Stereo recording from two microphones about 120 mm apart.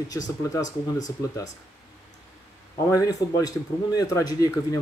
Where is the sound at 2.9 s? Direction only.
30° left (ahead or behind).